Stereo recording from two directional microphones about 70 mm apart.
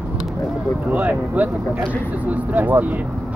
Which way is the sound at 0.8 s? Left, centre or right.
Right.